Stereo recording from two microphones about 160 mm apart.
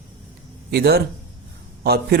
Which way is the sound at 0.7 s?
85° right.